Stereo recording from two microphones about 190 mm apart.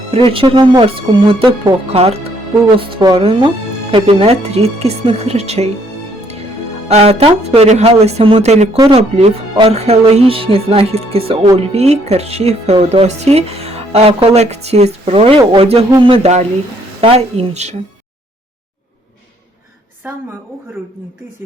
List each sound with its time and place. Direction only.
0.3 s speech: 25° right (ahead or behind)
6.8 s speech: 35° right (ahead or behind)